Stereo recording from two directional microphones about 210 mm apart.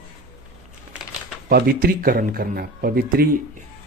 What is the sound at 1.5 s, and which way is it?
Speech, 45° right (ahead or behind).